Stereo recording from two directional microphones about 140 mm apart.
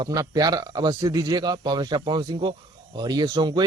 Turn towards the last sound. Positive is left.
turn(degrees=-35)  # may be behind; listen again after turning